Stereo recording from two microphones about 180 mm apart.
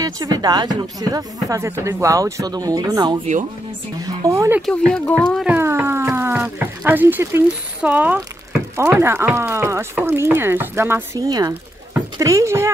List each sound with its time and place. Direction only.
0.0 s speech: 20° right (ahead or behind)
4.6 s speech: centre (ahead or behind)
5.5 s speech: 15° right (ahead or behind)